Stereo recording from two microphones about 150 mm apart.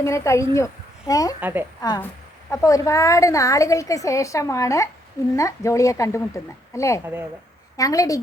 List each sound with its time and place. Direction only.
0.0 s speech: 20° left (ahead or behind)
1.4 s speech: 15° right (ahead or behind)
2.5 s a woman's voice: 20° left (ahead or behind)
7.0 s speech: 15° right (ahead or behind)
7.8 s a woman's voice: 25° left (ahead or behind)